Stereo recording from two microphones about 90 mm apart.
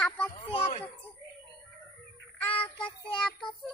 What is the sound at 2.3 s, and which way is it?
Child singing, 20° left (ahead or behind).